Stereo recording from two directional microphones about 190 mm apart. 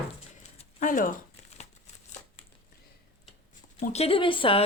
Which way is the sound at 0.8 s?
45° left (ahead or behind).